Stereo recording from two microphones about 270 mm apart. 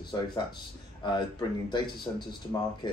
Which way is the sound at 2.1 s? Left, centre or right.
Centre.